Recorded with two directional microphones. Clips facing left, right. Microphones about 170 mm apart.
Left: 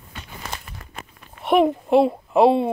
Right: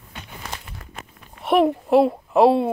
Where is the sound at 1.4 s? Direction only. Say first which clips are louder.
Even; centre (ahead or behind).